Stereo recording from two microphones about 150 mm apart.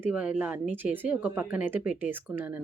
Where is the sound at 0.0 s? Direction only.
10° right (ahead or behind).